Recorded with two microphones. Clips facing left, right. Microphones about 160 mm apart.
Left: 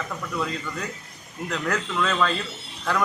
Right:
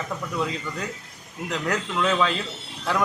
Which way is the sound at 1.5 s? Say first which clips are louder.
Even; 10° right (ahead or behind).